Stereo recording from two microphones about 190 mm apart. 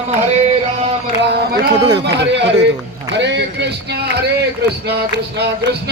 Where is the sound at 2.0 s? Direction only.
65° right (ahead or behind).